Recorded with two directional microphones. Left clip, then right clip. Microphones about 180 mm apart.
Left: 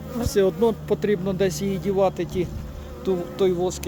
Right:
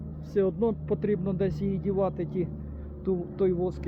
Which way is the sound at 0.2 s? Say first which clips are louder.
Left 7 dB; 25° left (ahead or behind).